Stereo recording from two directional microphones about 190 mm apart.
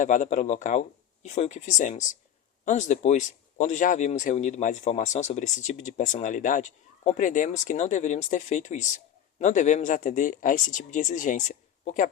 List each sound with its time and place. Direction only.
0.0 s speech: 40° left (ahead or behind)